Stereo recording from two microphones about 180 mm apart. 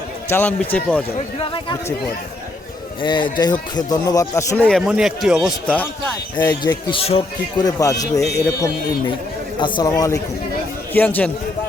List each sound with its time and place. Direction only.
0.3 s speech: 10° left (ahead or behind)
3.0 s a man's voice: 25° left (ahead or behind)
4.5 s speech: 5° left (ahead or behind)
5.6 s speech: 10° left (ahead or behind)
6.3 s a man's voice: 25° left (ahead or behind)
7.6 s a man's voice: 20° left (ahead or behind)
9.6 s a man's voice: 25° left (ahead or behind)
10.9 s speech: 10° left (ahead or behind)